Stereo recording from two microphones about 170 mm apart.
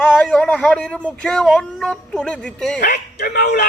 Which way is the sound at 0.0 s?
5° left (ahead or behind).